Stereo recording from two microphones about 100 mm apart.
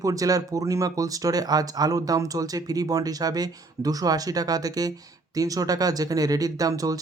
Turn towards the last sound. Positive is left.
turn(degrees=-35)  # may be behind; listen again after turning